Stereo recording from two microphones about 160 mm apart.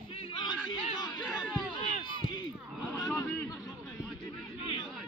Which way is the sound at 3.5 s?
20° left (ahead or behind).